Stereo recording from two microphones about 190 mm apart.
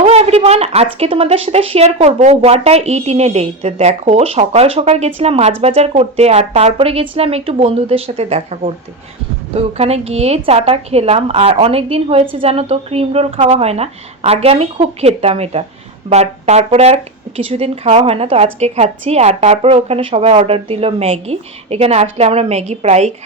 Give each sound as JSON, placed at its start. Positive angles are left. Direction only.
{"t": 0.0, "sound": "a woman's voice", "side_deg": -30}